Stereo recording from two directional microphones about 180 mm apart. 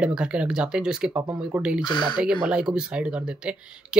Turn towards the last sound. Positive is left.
turn(degrees=-5)  # may be behind; listen again after turning